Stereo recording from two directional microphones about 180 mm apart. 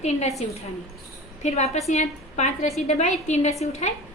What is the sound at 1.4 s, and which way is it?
A woman's voice, 35° left (ahead or behind).